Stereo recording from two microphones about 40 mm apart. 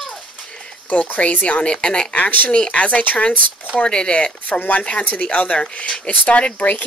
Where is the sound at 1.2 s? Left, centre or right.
Left.